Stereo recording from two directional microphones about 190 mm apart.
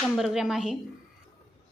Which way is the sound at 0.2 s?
Centre (ahead or behind).